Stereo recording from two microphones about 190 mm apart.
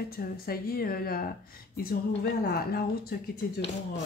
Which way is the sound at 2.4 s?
55° left (ahead or behind).